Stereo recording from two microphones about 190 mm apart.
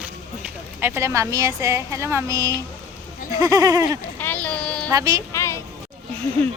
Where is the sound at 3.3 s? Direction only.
20° right (ahead or behind).